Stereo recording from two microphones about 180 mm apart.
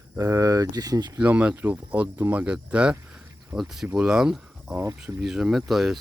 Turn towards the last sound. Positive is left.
turn(degrees=0)  # may be behind; listen again after turning